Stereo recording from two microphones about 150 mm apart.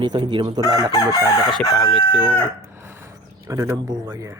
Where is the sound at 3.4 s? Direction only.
20° right (ahead or behind).